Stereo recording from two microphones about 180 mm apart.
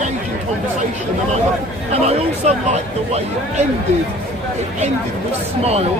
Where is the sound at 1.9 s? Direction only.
35° right (ahead or behind).